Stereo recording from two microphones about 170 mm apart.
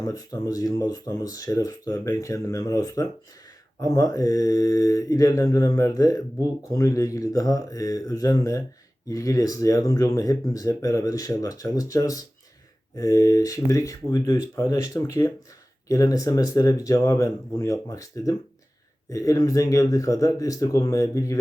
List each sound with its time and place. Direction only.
0.0 s mantra: 20° left (ahead or behind)